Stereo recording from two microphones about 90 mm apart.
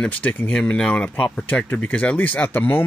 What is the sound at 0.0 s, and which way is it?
Speech, 15° left (ahead or behind).